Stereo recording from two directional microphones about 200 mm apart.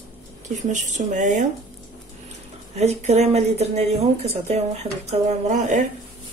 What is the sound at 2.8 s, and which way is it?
Speech, 35° right (ahead or behind).